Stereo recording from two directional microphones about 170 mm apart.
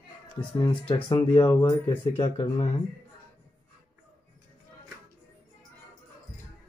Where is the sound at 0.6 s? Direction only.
25° left (ahead or behind).